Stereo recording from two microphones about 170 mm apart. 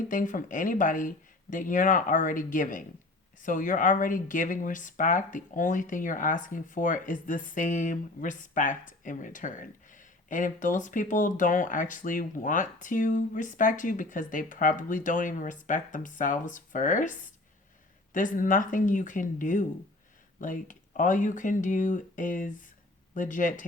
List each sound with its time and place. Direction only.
0.1 s speech: 50° left (ahead or behind)